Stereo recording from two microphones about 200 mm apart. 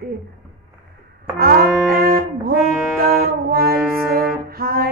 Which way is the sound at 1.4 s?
50° right (ahead or behind).